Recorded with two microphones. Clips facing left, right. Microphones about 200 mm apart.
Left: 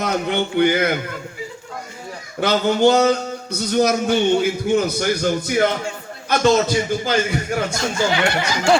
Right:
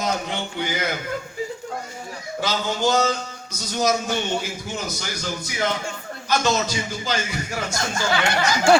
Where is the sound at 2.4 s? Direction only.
60° left (ahead or behind).